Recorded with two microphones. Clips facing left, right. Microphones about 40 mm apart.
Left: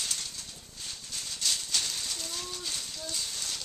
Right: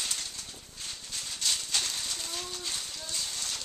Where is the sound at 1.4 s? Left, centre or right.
Centre.